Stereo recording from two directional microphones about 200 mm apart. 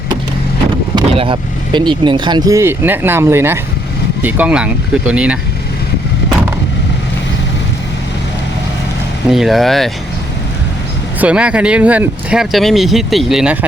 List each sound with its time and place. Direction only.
0.9 s speech: 25° right (ahead or behind); by 5.4 s 5° right (ahead or behind)
9.3 s speech: centre (ahead or behind)
11.2 s speech: 5° right (ahead or behind)